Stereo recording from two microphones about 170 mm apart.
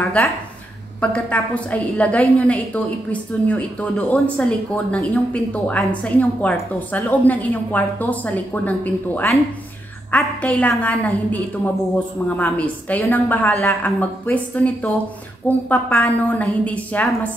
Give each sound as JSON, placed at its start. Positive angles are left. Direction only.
{"t": 0.0, "sound": "speech", "side_deg": 10}